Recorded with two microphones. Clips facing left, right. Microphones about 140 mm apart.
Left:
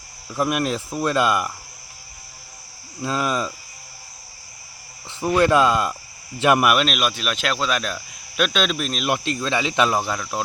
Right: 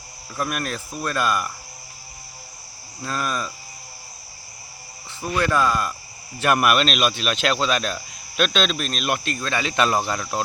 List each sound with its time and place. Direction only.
0.3 s cricket: 20° left (ahead or behind)
3.0 s speech: 15° left (ahead or behind)
5.2 s cricket: 20° left (ahead or behind)
6.4 s speech: 15° left (ahead or behind)
10.1 s speech: 5° left (ahead or behind)